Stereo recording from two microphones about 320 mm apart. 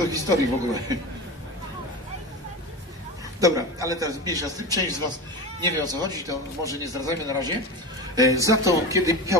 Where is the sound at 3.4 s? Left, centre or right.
Centre.